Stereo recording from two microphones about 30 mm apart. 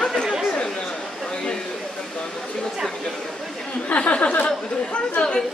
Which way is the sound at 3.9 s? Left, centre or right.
Left.